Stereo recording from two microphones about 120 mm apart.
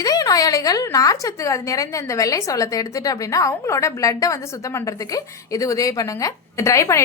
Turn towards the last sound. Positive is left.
turn(degrees=25)  # may be behind; listen again after turning